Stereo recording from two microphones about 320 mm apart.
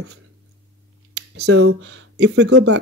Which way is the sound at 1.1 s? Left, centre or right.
Right.